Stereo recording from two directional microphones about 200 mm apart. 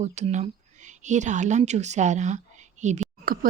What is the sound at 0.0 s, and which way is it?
A woman's voice, 35° right (ahead or behind).